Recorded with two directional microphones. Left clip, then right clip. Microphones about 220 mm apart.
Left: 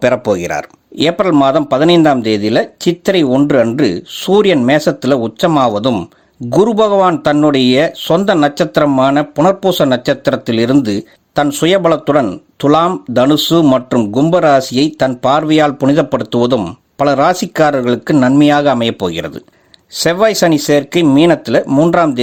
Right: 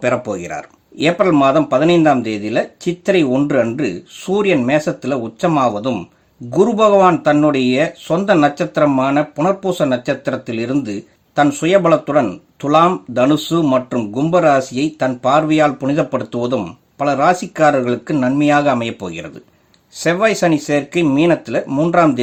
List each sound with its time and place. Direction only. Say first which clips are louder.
0.0 s speech: left 6 dB; 35° left (ahead or behind)